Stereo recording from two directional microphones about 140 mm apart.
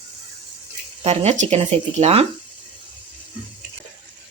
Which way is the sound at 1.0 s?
50° right (ahead or behind).